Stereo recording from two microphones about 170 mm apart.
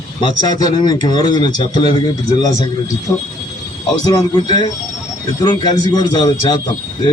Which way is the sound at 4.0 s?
25° left (ahead or behind).